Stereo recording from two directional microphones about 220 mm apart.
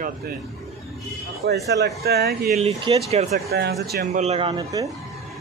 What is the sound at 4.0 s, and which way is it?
Speech, 30° right (ahead or behind).